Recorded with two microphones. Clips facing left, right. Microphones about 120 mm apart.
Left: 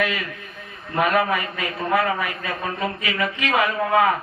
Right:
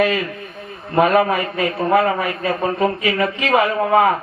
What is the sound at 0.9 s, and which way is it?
A man's voice, 30° right (ahead or behind).